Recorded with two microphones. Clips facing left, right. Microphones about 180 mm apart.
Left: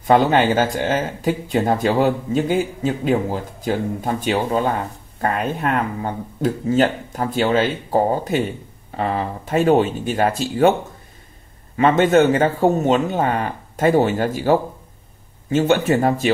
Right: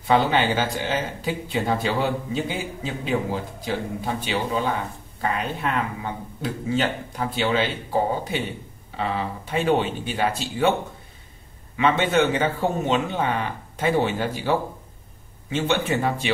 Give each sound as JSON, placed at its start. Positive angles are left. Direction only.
{"t": 0.0, "sound": "speech", "side_deg": 45}
{"t": 11.7, "sound": "speech", "side_deg": 45}